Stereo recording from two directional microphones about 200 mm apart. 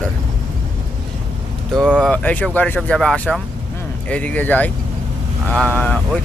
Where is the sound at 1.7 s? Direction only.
Centre (ahead or behind).